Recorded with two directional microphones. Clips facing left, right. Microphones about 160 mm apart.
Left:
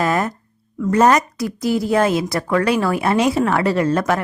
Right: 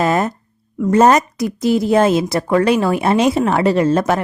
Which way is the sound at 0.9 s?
25° right (ahead or behind).